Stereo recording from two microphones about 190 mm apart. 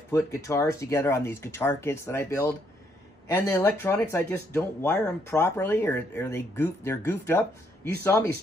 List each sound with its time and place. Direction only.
0.1 s speech: 15° left (ahead or behind)